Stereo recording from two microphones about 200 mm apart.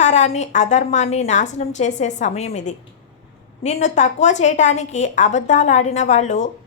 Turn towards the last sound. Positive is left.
turn(degrees=35)  # may be behind; listen again after turning